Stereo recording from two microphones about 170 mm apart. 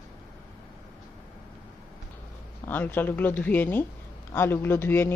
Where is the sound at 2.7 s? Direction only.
10° left (ahead or behind).